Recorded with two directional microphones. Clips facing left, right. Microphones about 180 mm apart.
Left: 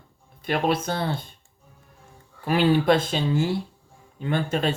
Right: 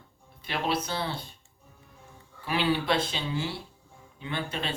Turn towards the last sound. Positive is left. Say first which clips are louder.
# left 9 dB
turn(degrees=45)  # may be behind; listen again after turning